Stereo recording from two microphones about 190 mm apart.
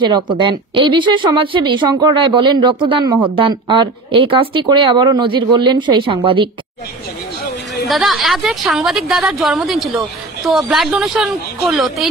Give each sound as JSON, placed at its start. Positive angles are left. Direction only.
{"t": 0.0, "sound": "a woman's voice", "side_deg": -25}
{"t": 7.9, "sound": "a woman's voice", "side_deg": 0}